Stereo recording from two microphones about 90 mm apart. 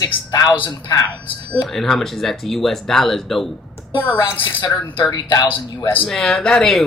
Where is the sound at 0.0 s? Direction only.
45° left (ahead or behind).